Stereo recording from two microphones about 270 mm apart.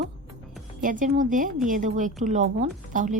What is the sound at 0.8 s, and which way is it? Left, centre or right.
A woman's voice, right.